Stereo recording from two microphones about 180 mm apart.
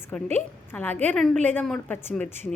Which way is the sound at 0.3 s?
10° left (ahead or behind).